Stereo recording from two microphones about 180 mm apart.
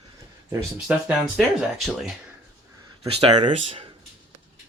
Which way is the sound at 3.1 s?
30° right (ahead or behind).